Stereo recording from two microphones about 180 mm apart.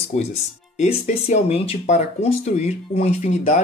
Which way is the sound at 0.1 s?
40° left (ahead or behind).